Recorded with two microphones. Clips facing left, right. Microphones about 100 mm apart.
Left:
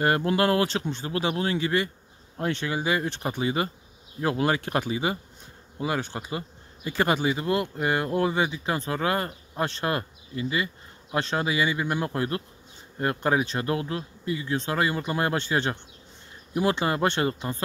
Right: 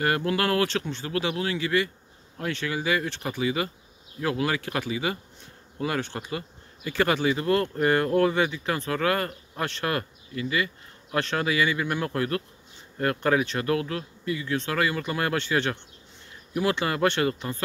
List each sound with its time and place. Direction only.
0.0 s speech: 30° left (ahead or behind)
5.8 s bee: 15° left (ahead or behind)
6.3 s speech: 25° left (ahead or behind)